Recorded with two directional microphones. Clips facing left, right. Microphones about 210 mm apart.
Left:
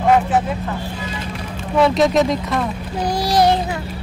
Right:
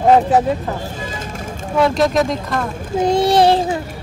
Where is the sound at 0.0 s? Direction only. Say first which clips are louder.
Right 3 dB; 35° right (ahead or behind).